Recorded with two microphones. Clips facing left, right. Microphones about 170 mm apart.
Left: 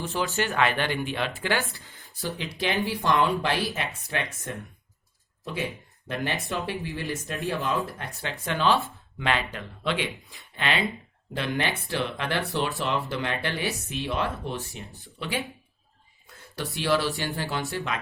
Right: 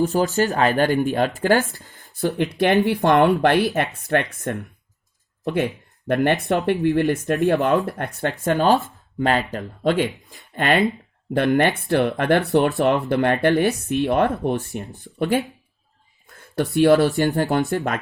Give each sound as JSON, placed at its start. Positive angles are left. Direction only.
{"t": 0.0, "sound": "speech", "side_deg": -40}
{"t": 6.1, "sound": "speech", "side_deg": -55}
{"t": 16.3, "sound": "a sound", "side_deg": -50}
{"t": 16.7, "sound": "speech", "side_deg": -50}